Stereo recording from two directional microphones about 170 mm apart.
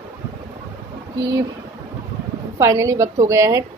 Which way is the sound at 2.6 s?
20° right (ahead or behind).